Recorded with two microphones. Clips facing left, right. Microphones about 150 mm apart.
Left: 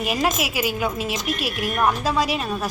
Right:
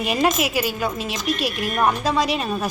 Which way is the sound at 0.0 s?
5° left (ahead or behind).